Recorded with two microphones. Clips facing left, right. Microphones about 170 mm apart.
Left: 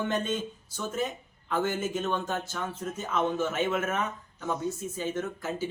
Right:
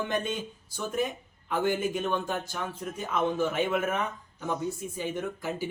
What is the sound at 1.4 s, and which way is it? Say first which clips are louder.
Speech: right 2 dB; 15° right (ahead or behind).